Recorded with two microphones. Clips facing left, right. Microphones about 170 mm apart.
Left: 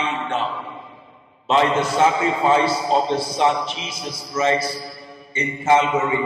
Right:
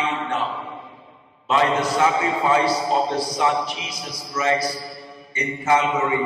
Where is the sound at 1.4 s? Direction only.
25° left (ahead or behind).